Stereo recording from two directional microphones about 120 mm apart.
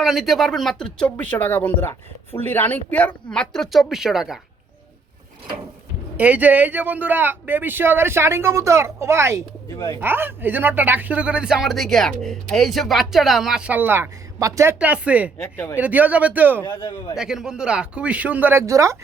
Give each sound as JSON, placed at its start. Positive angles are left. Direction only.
{"t": 0.0, "sound": "speech", "side_deg": 0}
{"t": 6.1, "sound": "speech", "side_deg": -15}
{"t": 9.6, "sound": "speech", "side_deg": 25}
{"t": 10.0, "sound": "speech", "side_deg": -15}
{"t": 14.8, "sound": "speech", "side_deg": -10}
{"t": 15.4, "sound": "speech", "side_deg": 20}
{"t": 15.8, "sound": "speech", "side_deg": -15}
{"t": 16.6, "sound": "speech", "side_deg": 30}
{"t": 17.2, "sound": "speech", "side_deg": -5}